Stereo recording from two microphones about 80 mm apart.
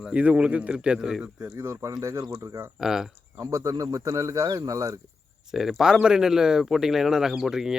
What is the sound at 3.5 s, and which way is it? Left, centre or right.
Speech, right.